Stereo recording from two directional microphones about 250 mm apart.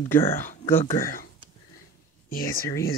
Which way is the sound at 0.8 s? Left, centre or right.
Left.